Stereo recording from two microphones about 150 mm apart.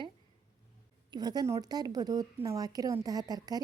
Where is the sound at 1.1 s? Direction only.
25° right (ahead or behind).